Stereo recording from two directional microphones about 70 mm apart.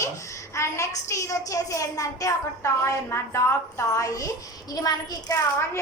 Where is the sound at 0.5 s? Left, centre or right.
Left.